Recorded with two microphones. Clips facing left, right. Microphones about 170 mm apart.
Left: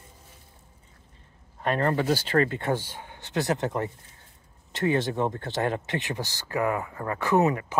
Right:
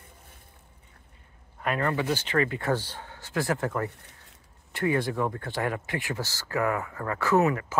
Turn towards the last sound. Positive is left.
turn(degrees=20)  # may be behind; listen again after turning